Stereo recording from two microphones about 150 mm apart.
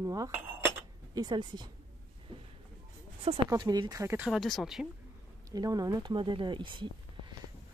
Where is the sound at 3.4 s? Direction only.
25° right (ahead or behind).